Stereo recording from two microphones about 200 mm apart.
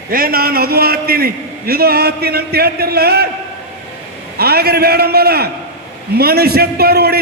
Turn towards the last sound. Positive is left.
turn(degrees=-50)  # may be behind; listen again after turning